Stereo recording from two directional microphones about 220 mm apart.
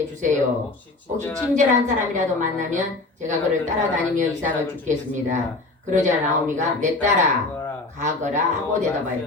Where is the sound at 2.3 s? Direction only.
35° right (ahead or behind).